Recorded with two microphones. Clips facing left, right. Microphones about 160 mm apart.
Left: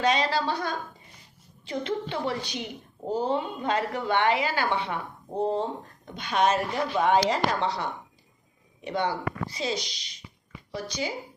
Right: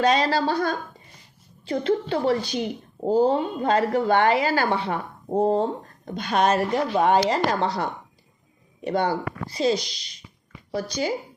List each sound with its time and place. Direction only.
0.0 s a woman's voice: 40° right (ahead or behind)